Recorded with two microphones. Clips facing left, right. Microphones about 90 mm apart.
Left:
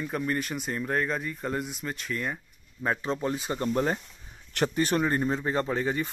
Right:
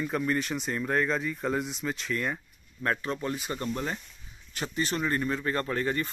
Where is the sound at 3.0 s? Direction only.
30° left (ahead or behind).